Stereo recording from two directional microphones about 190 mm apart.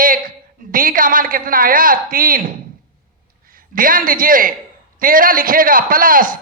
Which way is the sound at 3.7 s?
45° right (ahead or behind).